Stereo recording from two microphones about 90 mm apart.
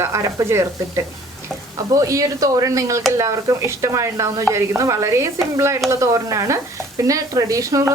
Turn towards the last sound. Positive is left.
turn(degrees=-35)  # may be behind; listen again after turning